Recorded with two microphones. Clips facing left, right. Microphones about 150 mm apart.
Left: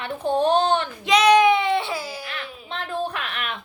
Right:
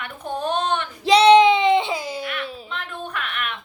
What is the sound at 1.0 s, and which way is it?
Speech, 30° right (ahead or behind).